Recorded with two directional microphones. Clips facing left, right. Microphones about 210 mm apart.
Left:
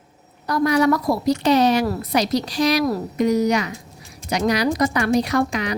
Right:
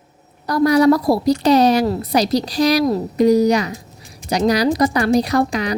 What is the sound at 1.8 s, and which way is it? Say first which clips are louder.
Speech: right 4 dB; 25° right (ahead or behind).